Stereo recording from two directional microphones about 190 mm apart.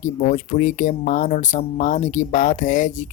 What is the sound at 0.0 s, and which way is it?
Speech, 40° left (ahead or behind).